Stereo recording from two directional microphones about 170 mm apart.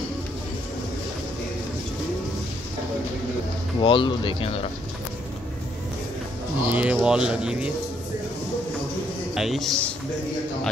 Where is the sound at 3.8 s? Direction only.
30° left (ahead or behind).